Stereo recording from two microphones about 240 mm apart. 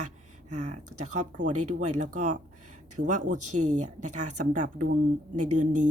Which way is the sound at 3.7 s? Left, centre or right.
Right.